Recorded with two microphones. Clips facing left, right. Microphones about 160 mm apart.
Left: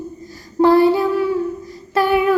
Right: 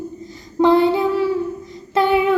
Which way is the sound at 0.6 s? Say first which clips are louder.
Left 2 dB; 20° right (ahead or behind).